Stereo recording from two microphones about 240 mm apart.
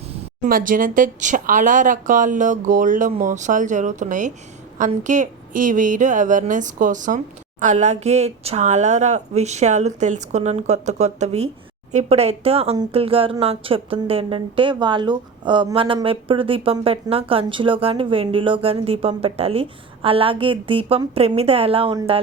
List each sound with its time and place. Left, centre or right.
0.4 s a woman's voice: right